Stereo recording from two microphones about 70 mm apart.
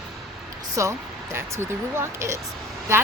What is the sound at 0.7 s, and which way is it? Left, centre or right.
Speech, right.